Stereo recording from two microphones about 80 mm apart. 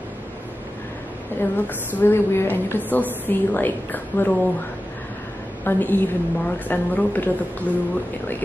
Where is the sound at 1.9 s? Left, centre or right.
Left.